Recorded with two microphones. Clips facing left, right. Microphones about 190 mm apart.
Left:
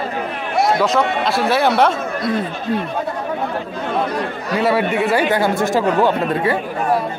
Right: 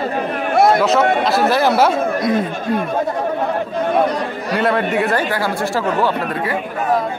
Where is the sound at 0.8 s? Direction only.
Centre (ahead or behind).